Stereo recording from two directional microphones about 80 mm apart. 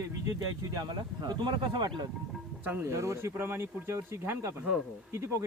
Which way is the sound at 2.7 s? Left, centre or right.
Right.